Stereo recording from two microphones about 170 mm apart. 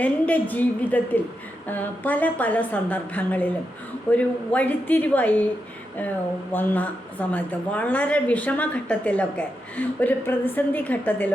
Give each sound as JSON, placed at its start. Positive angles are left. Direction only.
{"t": 0.0, "sound": "speech", "side_deg": 10}
{"t": 6.5, "sound": "speech", "side_deg": 10}